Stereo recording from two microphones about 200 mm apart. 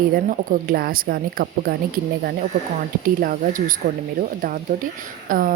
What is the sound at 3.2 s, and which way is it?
A woman's voice, 45° right (ahead or behind).